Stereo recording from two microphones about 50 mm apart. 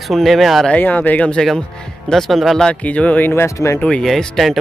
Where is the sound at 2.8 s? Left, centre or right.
Left.